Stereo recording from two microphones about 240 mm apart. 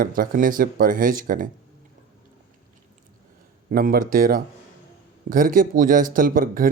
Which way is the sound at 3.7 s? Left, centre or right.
Right.